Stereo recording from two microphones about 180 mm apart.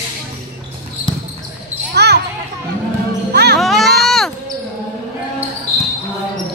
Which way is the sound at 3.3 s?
70° right (ahead or behind).